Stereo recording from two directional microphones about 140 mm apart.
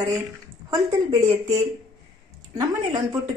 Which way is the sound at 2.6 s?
25° right (ahead or behind).